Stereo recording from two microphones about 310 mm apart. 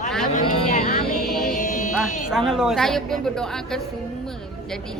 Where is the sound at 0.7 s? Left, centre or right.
Left.